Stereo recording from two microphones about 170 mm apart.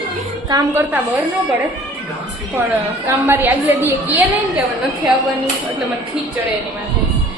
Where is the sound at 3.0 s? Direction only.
15° right (ahead or behind).